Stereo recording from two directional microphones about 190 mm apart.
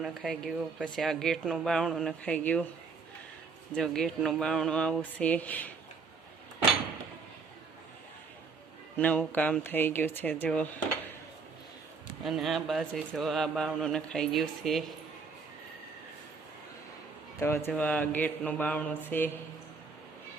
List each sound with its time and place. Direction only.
0.0 s speech: centre (ahead or behind)
3.8 s speech: centre (ahead or behind)
9.0 s speech: 10° left (ahead or behind)
12.2 s speech: centre (ahead or behind)
17.7 s speech: 10° left (ahead or behind)